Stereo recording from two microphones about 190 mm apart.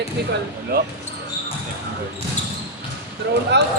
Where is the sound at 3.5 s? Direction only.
65° right (ahead or behind).